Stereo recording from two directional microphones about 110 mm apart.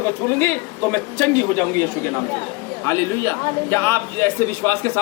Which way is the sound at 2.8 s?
25° left (ahead or behind).